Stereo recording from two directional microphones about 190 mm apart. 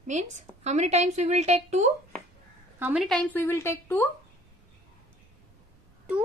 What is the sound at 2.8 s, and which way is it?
Speech, 10° right (ahead or behind).